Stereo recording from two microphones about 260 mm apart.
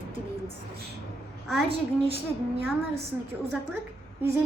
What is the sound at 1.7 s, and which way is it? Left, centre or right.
Speech, right.